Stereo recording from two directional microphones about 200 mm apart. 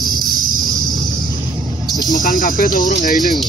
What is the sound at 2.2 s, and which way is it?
Speech, 40° left (ahead or behind).